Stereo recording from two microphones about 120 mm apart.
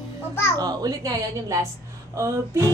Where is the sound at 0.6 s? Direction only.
30° right (ahead or behind).